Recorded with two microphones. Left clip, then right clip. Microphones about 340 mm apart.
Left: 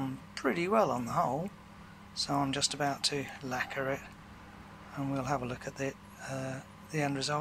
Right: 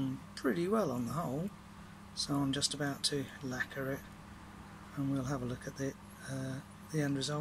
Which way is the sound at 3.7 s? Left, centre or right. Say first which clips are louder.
Left 5 dB; left.